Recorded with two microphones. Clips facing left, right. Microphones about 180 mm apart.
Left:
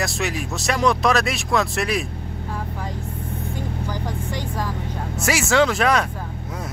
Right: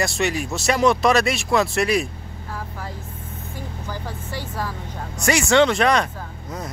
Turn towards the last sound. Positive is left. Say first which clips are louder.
# right 1 dB
turn(degrees=5)  # may be behind; listen again after turning